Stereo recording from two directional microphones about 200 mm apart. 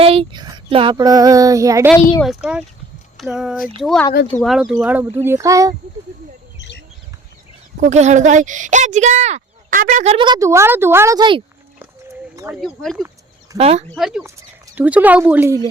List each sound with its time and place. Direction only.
0.0 s female singing: 30° right (ahead or behind)
2.2 s speech: 5° right (ahead or behind)
7.8 s speech: 35° right (ahead or behind)
12.5 s speech: centre (ahead or behind)
13.6 s speech: 30° right (ahead or behind)
13.9 s speech: centre (ahead or behind)